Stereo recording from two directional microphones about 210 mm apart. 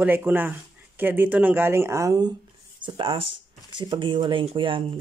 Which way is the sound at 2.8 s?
25° right (ahead or behind).